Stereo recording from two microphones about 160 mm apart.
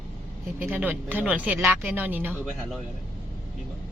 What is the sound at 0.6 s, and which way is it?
Speech, 10° right (ahead or behind).